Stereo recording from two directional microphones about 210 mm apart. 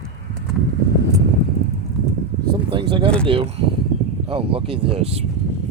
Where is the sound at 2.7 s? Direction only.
25° right (ahead or behind).